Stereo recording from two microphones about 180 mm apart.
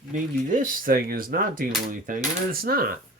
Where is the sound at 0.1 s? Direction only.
45° right (ahead or behind).